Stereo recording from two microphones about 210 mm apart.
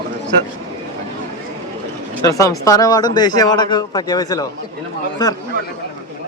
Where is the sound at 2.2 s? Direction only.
15° left (ahead or behind).